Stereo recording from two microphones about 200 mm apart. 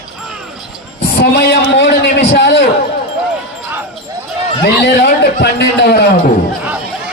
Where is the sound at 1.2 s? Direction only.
55° left (ahead or behind).